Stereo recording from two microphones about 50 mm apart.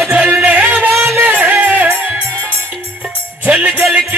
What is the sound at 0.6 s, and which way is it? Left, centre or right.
Music, right.